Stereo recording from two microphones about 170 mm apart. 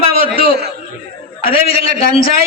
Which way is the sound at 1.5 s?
35° left (ahead or behind).